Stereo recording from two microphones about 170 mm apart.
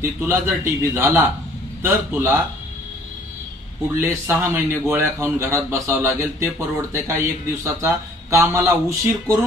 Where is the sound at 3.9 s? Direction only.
10° right (ahead or behind).